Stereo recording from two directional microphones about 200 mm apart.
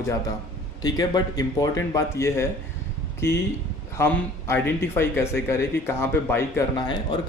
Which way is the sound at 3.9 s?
10° left (ahead or behind).